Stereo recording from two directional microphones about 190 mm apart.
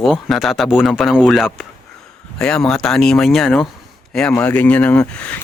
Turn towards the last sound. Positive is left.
turn(degrees=5)  # may be behind; listen again after turning